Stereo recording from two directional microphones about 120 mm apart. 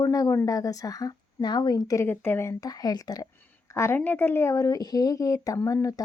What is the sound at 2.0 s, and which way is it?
A woman's voice, 15° left (ahead or behind).